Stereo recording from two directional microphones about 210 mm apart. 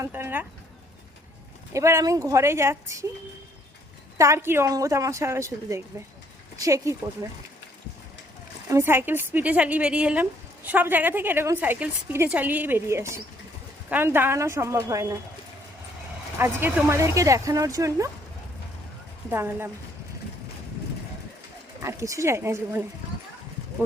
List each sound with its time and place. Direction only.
0.0 s a sound: 10° right (ahead or behind)
1.7 s a woman's voice: 15° right (ahead or behind)
4.2 s a woman's voice: 10° right (ahead or behind)
8.7 s a woman's voice: 10° right (ahead or behind)
16.4 s a woman's voice: 10° right (ahead or behind)
19.3 s a woman's voice: 10° right (ahead or behind)
21.8 s a woman's voice: 15° right (ahead or behind)